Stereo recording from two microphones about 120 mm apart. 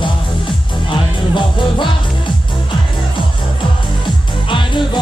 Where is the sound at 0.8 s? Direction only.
40° left (ahead or behind).